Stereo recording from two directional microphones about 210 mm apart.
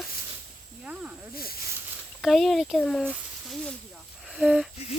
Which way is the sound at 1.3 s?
45° left (ahead or behind).